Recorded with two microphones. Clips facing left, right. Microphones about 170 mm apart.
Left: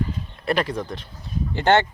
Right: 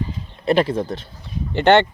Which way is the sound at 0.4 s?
25° right (ahead or behind).